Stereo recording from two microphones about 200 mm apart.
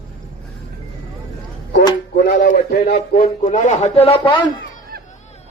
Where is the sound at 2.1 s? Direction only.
55° left (ahead or behind).